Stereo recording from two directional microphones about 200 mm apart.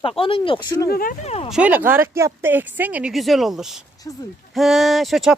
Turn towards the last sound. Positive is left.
turn(degrees=0)  # may be behind; listen again after turning